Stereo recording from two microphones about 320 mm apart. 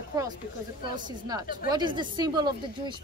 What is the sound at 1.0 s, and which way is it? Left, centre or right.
Speech, centre.